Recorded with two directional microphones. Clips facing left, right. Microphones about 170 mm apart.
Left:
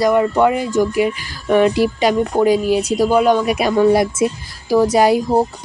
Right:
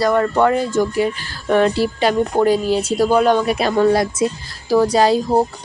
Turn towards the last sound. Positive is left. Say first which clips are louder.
# left 1 dB
turn(degrees=20)  # may be behind; listen again after turning